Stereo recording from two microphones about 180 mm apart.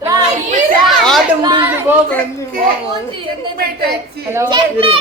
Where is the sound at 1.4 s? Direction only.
25° right (ahead or behind).